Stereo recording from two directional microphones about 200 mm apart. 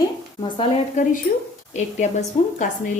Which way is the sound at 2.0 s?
30° left (ahead or behind).